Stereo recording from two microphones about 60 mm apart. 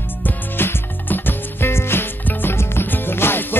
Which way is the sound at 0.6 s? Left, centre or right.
Left.